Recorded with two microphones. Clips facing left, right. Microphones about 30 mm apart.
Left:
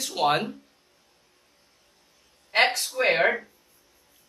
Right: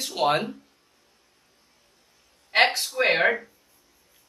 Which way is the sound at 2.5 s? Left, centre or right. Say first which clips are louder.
Right 1 dB; centre.